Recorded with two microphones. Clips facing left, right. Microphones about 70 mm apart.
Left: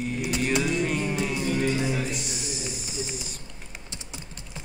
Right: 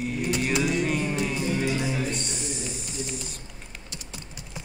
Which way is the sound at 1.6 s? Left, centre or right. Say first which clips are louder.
Left 1 dB; centre.